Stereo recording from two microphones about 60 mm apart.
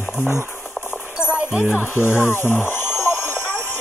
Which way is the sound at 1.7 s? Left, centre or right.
Left.